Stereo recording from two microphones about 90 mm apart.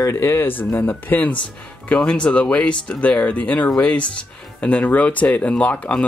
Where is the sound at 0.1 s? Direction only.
25° left (ahead or behind).